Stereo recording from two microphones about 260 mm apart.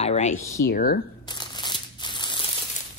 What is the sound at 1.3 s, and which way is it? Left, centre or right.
Crumpling, centre.